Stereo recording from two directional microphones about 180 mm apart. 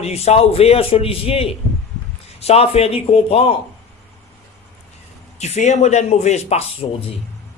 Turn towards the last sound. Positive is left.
turn(degrees=35)  # may be behind; listen again after turning